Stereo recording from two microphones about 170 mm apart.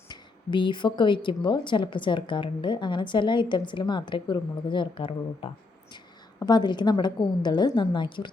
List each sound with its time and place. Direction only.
0.1 s speech: 30° left (ahead or behind)